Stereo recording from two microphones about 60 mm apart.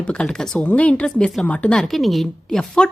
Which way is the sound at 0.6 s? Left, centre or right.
Left.